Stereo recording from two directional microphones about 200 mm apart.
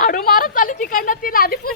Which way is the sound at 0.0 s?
45° left (ahead or behind).